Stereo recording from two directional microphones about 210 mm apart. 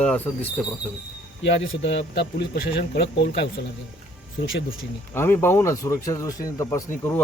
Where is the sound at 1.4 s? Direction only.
60° left (ahead or behind).